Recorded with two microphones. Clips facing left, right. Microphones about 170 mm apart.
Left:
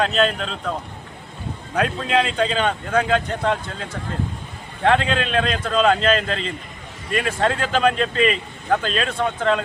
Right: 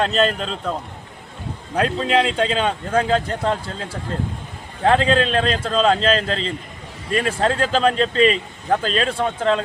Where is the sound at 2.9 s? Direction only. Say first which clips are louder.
Right 2 dB; 30° right (ahead or behind).